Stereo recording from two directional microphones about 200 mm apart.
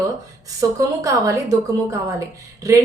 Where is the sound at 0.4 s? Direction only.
15° right (ahead or behind).